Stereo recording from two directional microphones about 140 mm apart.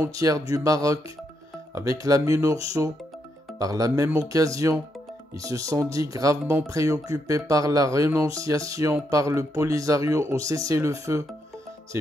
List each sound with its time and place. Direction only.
0.0 s speech: 25° right (ahead or behind)